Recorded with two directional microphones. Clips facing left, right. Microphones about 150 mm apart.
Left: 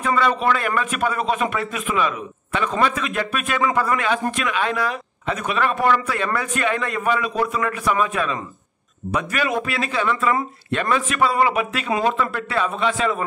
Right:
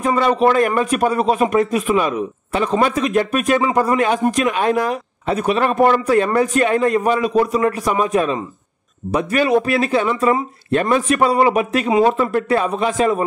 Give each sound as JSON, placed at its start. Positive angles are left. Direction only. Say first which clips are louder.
{"t": 0.0, "sound": "speech", "louder": "right 5 dB", "side_deg": -40}